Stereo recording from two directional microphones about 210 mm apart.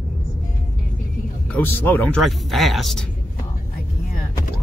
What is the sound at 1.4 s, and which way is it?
Speech, 10° left (ahead or behind).